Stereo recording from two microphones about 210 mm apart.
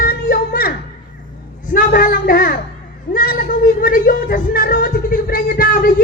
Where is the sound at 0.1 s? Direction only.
45° left (ahead or behind).